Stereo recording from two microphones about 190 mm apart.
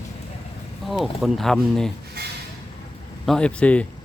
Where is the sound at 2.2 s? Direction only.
55° right (ahead or behind).